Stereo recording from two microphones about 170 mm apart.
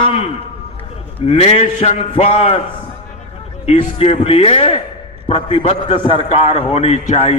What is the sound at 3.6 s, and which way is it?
A man's voice, 40° left (ahead or behind).